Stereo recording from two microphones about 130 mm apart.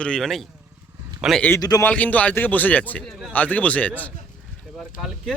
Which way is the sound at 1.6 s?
30° left (ahead or behind).